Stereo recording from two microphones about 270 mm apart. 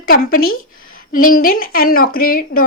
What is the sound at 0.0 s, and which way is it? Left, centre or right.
A woman's voice, left.